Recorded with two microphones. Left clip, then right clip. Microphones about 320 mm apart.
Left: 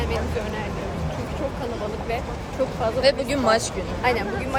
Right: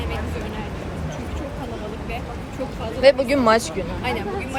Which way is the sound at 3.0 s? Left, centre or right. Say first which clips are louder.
Right 6 dB; centre.